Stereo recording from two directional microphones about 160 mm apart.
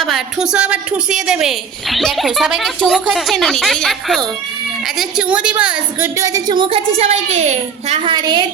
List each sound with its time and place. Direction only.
0.0 s a woman's voice: centre (ahead or behind)
6.1 s a child's voice: 20° right (ahead or behind); by 8.1 s 40° right (ahead or behind)
8.1 s a woman's voice: 25° right (ahead or behind)